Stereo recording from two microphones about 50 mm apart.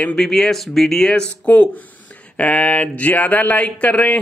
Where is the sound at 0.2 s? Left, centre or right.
Centre.